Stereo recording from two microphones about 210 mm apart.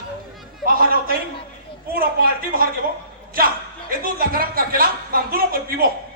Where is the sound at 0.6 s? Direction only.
45° right (ahead or behind).